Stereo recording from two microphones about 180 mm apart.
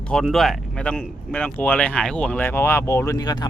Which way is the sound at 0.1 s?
Centre (ahead or behind).